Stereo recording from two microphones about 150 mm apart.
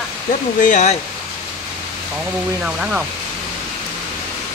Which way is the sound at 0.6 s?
55° left (ahead or behind).